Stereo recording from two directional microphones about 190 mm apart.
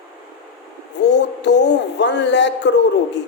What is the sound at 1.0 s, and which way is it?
Speech, 65° left (ahead or behind).